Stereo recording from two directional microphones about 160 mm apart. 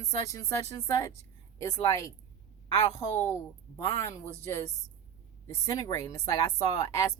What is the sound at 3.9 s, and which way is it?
Speech, 20° left (ahead or behind).